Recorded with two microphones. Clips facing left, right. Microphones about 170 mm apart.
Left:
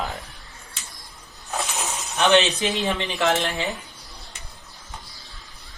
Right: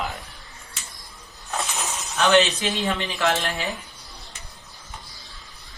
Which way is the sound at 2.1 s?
20° left (ahead or behind).